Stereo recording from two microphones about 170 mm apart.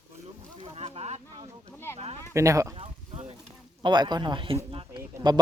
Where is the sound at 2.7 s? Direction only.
35° right (ahead or behind).